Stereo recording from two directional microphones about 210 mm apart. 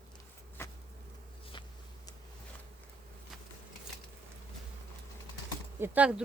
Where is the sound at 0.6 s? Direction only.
10° left (ahead or behind).